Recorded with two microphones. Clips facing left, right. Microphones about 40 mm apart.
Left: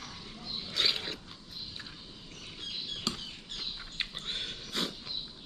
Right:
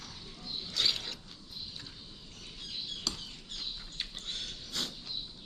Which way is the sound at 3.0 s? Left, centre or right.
Left.